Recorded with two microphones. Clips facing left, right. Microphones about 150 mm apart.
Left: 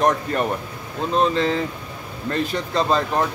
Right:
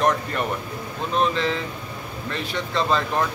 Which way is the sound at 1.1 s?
35° left (ahead or behind).